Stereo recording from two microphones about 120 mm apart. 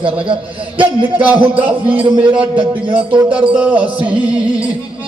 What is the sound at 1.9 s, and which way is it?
Music, 10° right (ahead or behind).